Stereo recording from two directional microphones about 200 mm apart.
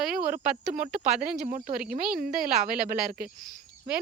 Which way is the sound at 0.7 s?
35° right (ahead or behind).